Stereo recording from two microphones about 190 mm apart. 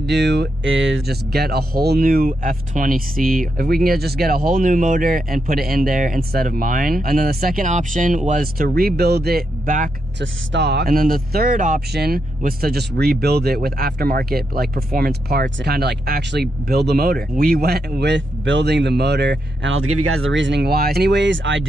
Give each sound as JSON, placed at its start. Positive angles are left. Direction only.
{"t": 0.0, "sound": "speech", "side_deg": -65}
{"t": 1.0, "sound": "speech", "side_deg": -55}
{"t": 10.2, "sound": "speech", "side_deg": -65}